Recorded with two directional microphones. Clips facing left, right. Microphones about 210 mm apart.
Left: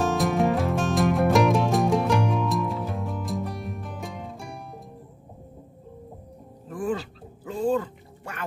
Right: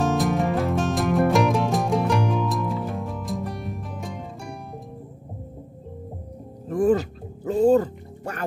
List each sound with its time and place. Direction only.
0.0 s music: centre (ahead or behind)
6.7 s music: 40° right (ahead or behind)